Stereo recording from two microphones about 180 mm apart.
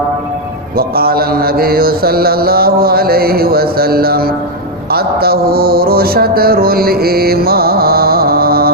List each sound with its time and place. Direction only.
0.8 s mantra: 55° right (ahead or behind)
4.9 s music: 60° right (ahead or behind)